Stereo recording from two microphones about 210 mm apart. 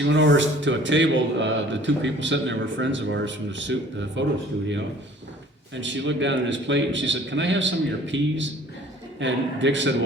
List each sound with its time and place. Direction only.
0.0 s speech: 60° right (ahead or behind)
5.7 s speech: 60° right (ahead or behind)